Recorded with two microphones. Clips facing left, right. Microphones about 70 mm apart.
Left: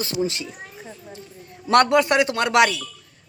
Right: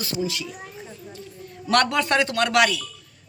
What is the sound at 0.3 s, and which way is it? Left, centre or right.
Speech, left.